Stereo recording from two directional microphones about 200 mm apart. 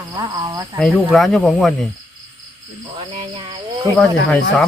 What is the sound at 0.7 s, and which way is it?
Speech, centre (ahead or behind).